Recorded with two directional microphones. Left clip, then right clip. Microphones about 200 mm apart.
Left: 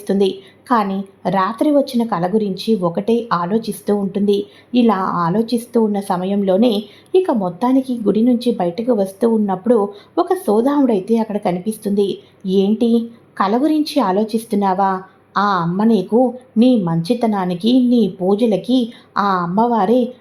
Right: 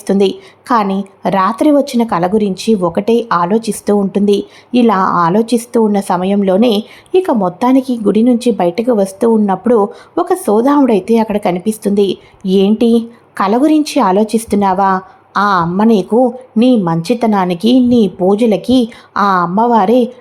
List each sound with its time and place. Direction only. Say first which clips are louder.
0.1 s a woman's voice: right 4 dB; 20° right (ahead or behind)